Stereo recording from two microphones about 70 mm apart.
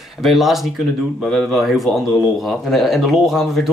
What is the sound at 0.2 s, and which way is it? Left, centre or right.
Speech, centre.